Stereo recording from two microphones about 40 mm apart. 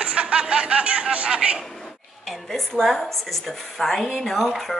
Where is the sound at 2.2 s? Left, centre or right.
Centre.